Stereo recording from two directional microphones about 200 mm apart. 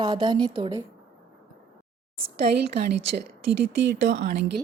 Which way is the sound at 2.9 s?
55° right (ahead or behind).